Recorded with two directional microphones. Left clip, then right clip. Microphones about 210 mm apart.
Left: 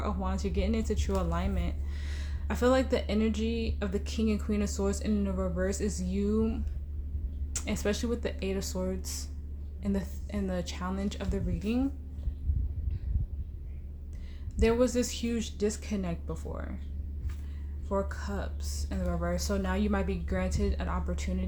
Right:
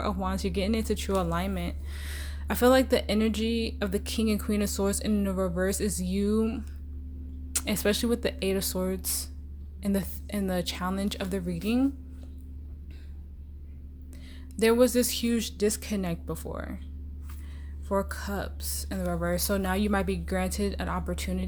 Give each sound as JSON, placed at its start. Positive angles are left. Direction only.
{"t": 0.0, "sound": "speech", "side_deg": -35}
{"t": 14.5, "sound": "speech", "side_deg": -40}
{"t": 17.8, "sound": "speech", "side_deg": -40}